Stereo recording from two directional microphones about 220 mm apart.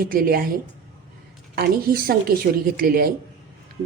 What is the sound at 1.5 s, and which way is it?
A woman's voice, 45° right (ahead or behind).